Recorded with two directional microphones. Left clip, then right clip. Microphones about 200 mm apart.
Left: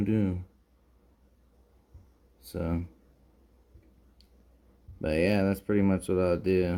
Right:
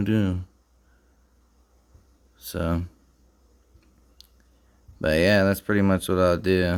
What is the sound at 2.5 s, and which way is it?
Speech, 45° right (ahead or behind).